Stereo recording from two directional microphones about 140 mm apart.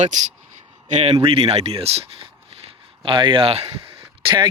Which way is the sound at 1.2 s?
45° right (ahead or behind).